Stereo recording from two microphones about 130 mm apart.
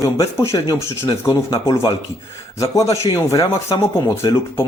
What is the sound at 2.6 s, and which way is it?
Speech, 25° left (ahead or behind).